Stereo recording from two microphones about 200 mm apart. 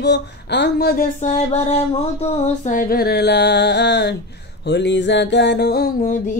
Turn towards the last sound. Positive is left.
turn(degrees=40)  # may be behind; listen again after turning